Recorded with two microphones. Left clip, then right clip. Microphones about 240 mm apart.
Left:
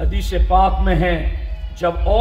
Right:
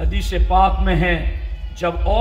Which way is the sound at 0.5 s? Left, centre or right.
Right.